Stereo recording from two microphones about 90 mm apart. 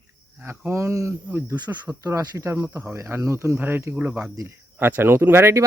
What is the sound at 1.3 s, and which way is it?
Speech, 20° right (ahead or behind).